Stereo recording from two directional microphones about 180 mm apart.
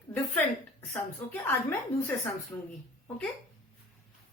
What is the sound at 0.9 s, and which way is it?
A woman's voice, 15° left (ahead or behind).